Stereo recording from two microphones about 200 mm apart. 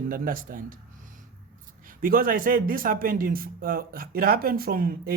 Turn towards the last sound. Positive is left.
turn(degrees=-45)  # may be behind; listen again after turning